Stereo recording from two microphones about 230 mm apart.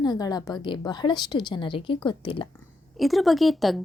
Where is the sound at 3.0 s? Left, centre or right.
Centre.